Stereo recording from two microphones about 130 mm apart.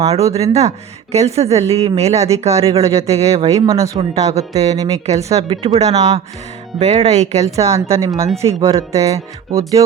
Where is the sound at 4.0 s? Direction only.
55° right (ahead or behind).